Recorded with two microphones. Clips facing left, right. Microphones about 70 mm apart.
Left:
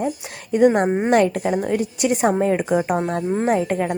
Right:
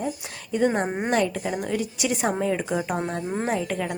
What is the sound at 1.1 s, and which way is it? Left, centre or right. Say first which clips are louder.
A woman's voice: left 6 dB; left.